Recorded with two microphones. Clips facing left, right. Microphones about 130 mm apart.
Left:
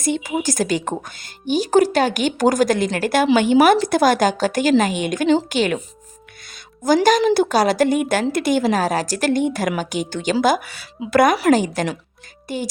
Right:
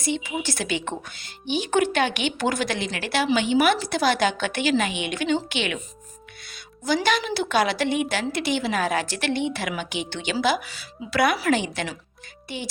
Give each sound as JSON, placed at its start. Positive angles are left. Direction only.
{"t": 0.0, "sound": "a woman's voice", "side_deg": 45}